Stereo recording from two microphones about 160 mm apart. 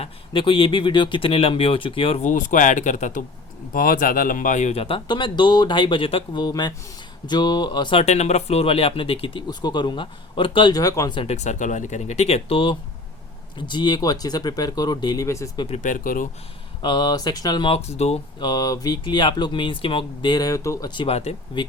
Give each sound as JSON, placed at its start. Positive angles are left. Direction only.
{"t": 0.0, "sound": "speech", "side_deg": 30}
{"t": 2.3, "sound": "speech", "side_deg": 55}
{"t": 3.8, "sound": "speech", "side_deg": 60}
{"t": 8.0, "sound": "speech", "side_deg": 45}
{"t": 11.2, "sound": "speech", "side_deg": 45}
{"t": 15.7, "sound": "speech", "side_deg": 55}
{"t": 16.8, "sound": "speech", "side_deg": 25}
{"t": 18.3, "sound": "speech", "side_deg": 25}